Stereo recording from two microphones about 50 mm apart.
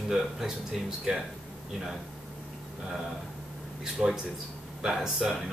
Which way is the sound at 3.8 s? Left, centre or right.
Centre.